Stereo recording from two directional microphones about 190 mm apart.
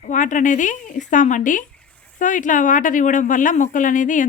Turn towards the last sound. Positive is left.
turn(degrees=45)  # may be behind; listen again after turning